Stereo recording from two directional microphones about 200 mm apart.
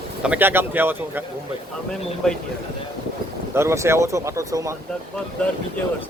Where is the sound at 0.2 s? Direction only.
10° right (ahead or behind).